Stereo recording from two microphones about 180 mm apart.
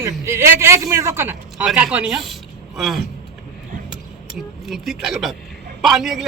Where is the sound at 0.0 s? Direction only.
15° right (ahead or behind).